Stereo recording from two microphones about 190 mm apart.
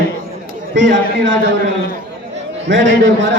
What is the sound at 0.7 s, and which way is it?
Speech, 75° right (ahead or behind).